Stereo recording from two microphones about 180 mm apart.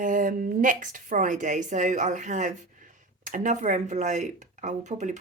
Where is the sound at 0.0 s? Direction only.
45° right (ahead or behind).